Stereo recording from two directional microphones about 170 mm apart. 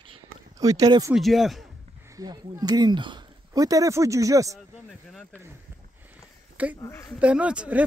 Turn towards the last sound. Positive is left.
turn(degrees=-5)  # may be behind; listen again after turning